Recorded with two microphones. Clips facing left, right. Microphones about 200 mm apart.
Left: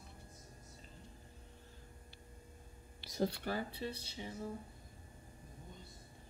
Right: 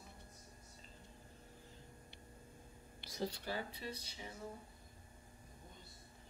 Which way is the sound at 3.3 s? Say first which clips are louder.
Left 4 dB; 60° left (ahead or behind).